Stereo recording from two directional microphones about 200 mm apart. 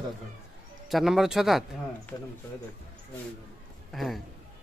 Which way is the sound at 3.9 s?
Centre (ahead or behind).